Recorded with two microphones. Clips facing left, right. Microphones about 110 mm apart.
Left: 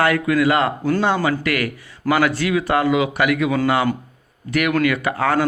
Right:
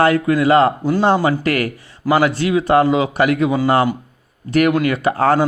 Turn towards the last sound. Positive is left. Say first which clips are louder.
# right 4 dB
turn(degrees=-30)  # may be behind; listen again after turning